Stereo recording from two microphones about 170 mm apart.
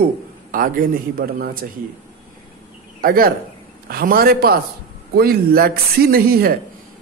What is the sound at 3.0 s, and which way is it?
A woman's voice, 60° right (ahead or behind).